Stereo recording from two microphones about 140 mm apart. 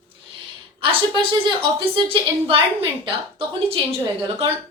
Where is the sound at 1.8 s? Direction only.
35° right (ahead or behind).